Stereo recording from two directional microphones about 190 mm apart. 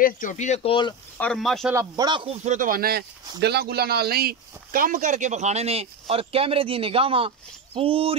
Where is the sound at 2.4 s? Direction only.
45° right (ahead or behind).